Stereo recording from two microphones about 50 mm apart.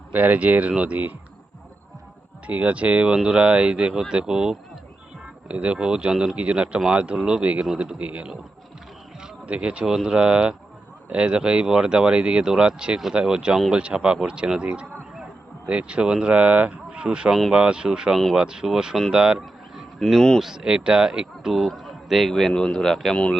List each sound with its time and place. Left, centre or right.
0.1 s speech: right
2.5 s speech: right; by 4.5 s centre
5.2 s speech: right
9.2 s a sound: right
9.8 s speech: centre
20.0 s a man's voice: centre
20.4 s a man's voice: centre